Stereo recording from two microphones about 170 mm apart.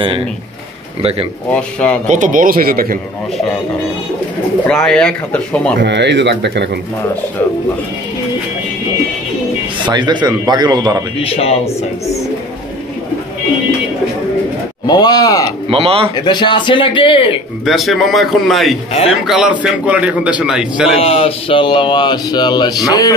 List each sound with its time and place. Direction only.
0.0 s speech: 30° right (ahead or behind)
1.5 s speech: 5° left (ahead or behind)
2.0 s speech: 50° right (ahead or behind)
4.6 s speech: 5° left (ahead or behind)
5.8 s speech: 90° right
9.8 s a man's voice: 25° right (ahead or behind)
11.2 s speech: 35° left (ahead or behind)
14.9 s speech: 25° left (ahead or behind)
15.7 s speech: 35° right (ahead or behind)
16.2 s speech: 25° left (ahead or behind)
17.6 s a man's voice: centre (ahead or behind)
21.0 s speech: 35° left (ahead or behind)